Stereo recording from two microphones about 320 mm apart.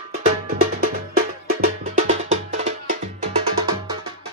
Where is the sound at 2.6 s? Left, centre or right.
Right.